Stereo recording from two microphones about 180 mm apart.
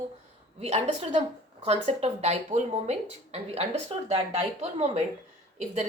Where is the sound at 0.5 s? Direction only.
35° right (ahead or behind).